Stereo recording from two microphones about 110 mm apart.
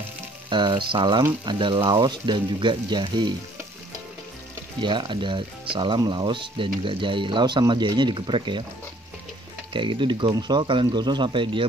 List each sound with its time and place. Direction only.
0.5 s speech: 45° right (ahead or behind)
4.8 s speech: 45° right (ahead or behind)
9.7 s speech: 50° right (ahead or behind)